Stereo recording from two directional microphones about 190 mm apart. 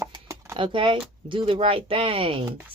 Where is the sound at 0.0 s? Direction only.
15° right (ahead or behind).